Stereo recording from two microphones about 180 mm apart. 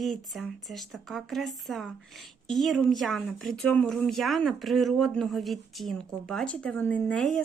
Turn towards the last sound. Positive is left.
turn(degrees=5)  # may be behind; listen again after turning